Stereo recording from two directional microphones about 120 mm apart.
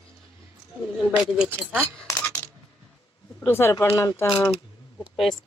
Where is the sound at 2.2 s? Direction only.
25° left (ahead or behind).